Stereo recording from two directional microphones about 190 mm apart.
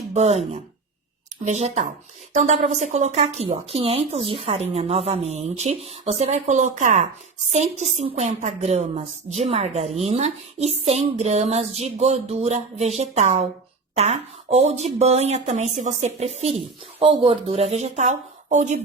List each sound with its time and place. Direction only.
0.1 s a woman's voice: 35° right (ahead or behind)